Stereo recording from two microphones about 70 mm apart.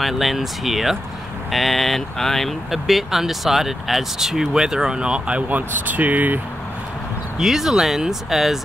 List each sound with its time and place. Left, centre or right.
0.0 s speech: centre; by 6.4 s right
7.3 s speech: centre